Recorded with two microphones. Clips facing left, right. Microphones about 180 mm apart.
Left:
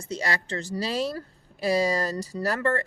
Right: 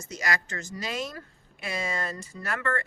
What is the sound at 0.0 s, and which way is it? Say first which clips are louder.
Speech: left 2 dB; 30° left (ahead or behind).